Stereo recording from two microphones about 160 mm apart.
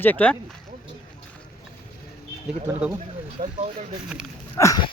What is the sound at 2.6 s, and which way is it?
Speech, 10° right (ahead or behind).